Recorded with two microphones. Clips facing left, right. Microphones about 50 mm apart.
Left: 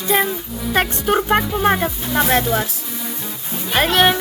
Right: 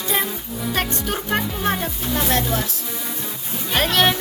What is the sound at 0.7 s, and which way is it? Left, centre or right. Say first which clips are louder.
A woman's voice: left 7 dB; left.